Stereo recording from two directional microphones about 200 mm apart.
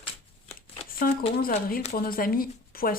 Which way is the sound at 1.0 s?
45° left (ahead or behind).